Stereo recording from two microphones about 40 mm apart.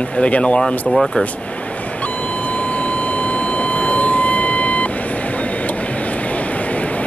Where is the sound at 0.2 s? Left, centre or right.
Left.